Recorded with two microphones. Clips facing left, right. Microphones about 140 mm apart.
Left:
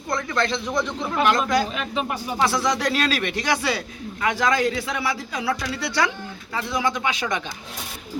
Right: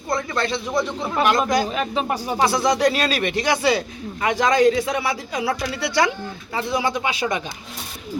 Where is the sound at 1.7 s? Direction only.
35° right (ahead or behind).